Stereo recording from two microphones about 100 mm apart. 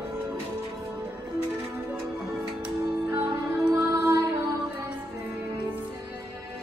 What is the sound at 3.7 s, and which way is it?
Music, 30° right (ahead or behind).